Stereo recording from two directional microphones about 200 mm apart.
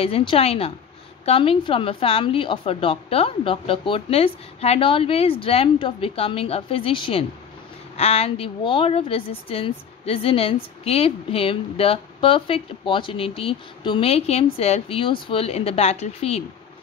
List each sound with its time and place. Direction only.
0.0 s a woman's voice: 25° left (ahead or behind)